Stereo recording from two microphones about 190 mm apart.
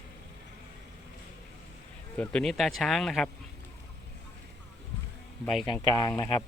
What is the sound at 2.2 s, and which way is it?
Speech, 5° left (ahead or behind).